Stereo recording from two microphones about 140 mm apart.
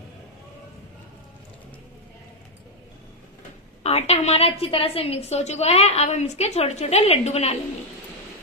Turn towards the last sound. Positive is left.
turn(degrees=50)  # may be behind; listen again after turning